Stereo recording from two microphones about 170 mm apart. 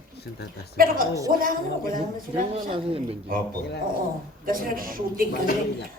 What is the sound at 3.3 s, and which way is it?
Speech, 60° right (ahead or behind).